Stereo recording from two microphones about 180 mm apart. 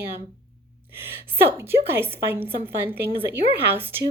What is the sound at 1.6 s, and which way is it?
Speech, 10° right (ahead or behind).